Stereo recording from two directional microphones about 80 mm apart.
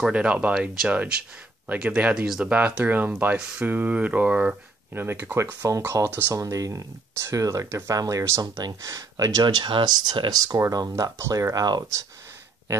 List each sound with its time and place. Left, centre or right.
0.0 s speech: centre
2.5 s speech: centre
4.9 s speech: right
5.6 s speech: right
6.0 s speech: right
6.3 s speech: right
9.4 s speech: right
10.3 s speech: right
11.1 s speech: right
11.5 s speech: right